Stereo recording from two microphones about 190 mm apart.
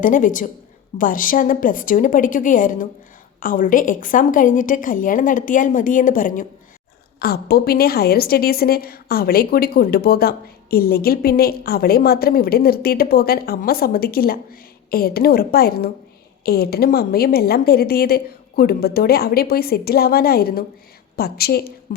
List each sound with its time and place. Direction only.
0.0 s a woman's voice: 45° left (ahead or behind)
7.2 s a woman's voice: 55° left (ahead or behind)